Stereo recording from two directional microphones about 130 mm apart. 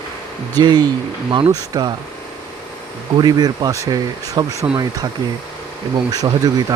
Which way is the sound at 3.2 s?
30° right (ahead or behind).